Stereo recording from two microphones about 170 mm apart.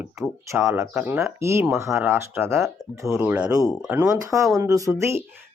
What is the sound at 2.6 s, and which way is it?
Speech, centre (ahead or behind).